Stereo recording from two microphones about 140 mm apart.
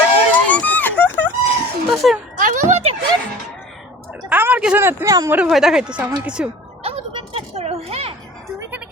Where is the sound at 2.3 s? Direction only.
65° right (ahead or behind).